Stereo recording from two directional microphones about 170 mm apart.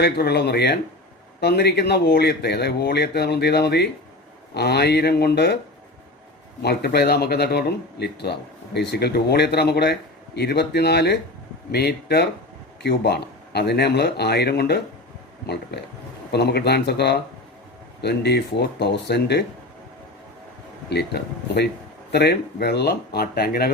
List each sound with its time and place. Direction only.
0.0 s speech: 70° left (ahead or behind)
6.6 s speech: 75° left (ahead or behind)
16.3 s speech: 75° left (ahead or behind)
20.9 s speech: 75° left (ahead or behind)